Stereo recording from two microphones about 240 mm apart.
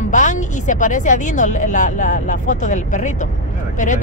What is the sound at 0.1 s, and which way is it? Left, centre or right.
A woman's voice, left.